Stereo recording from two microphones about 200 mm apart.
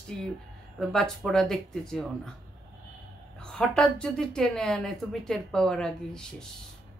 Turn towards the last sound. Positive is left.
turn(degrees=5)  # may be behind; listen again after turning